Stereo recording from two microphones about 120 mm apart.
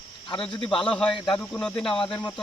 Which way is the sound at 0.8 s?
10° left (ahead or behind).